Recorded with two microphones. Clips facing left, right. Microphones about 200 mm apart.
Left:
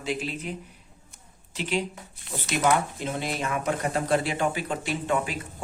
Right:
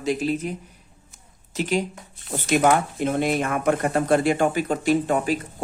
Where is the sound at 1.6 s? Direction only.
45° right (ahead or behind).